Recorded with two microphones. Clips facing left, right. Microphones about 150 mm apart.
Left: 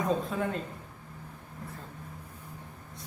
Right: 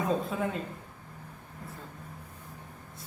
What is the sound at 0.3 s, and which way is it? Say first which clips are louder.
Speech: even; centre (ahead or behind).